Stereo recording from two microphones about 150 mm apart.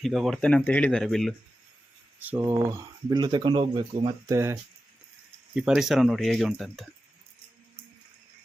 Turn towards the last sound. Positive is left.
turn(degrees=0)  # may be behind; listen again after turning